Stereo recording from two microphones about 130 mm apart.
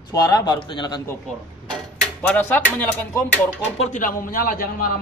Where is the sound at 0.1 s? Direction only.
30° left (ahead or behind).